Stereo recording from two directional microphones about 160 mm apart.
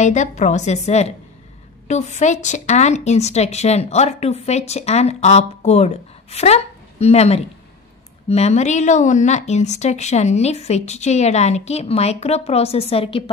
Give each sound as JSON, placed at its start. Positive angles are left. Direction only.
{"t": 0.0, "sound": "speech", "side_deg": 50}